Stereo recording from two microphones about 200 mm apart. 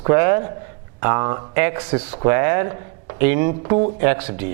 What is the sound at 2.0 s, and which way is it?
Speech, 30° right (ahead or behind).